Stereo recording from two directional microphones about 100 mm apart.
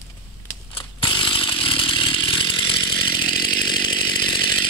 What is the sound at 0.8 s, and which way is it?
Chainsaw, 55° left (ahead or behind).